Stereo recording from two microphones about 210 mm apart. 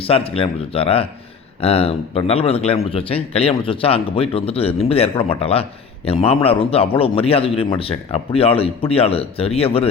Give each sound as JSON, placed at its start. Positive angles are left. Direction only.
{"t": 0.0, "sound": "a man's voice", "side_deg": 25}